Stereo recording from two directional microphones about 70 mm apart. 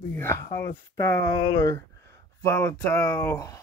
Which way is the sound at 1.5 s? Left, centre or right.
Left.